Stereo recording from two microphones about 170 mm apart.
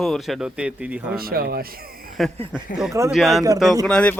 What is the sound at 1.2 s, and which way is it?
Speech, 65° right (ahead or behind).